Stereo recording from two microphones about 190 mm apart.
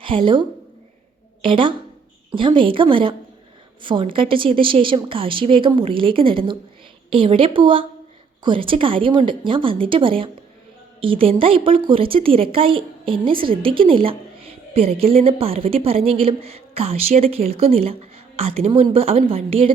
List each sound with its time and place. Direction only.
0.0 s a woman's voice: 25° right (ahead or behind)